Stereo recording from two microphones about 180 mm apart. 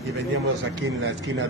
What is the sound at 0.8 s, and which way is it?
Speech, 90° right.